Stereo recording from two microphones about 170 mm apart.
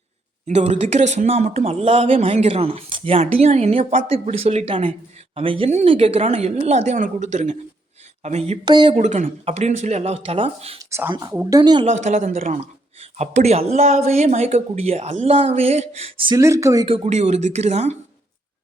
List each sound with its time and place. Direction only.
0.4 s speech: 40° right (ahead or behind)
8.6 s speech: 25° right (ahead or behind)
9.0 s speech: 45° right (ahead or behind)
10.8 s speech: 15° right (ahead or behind)
11.9 s speech: 45° right (ahead or behind)
12.5 s speech: 40° right (ahead or behind)
16.4 s speech: 20° right (ahead or behind)
16.8 s speech: 35° right (ahead or behind)